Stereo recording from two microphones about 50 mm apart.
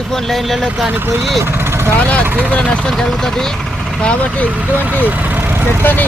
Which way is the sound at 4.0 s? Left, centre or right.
Left.